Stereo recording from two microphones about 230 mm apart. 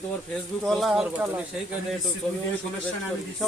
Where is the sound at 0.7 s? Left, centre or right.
Centre.